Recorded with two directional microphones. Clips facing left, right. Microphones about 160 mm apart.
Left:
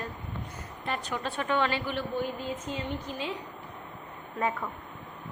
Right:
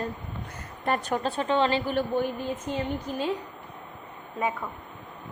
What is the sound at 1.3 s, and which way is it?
Speech, 30° right (ahead or behind).